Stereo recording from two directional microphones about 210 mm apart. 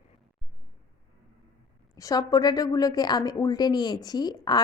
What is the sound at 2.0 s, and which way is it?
A woman's voice, 15° left (ahead or behind).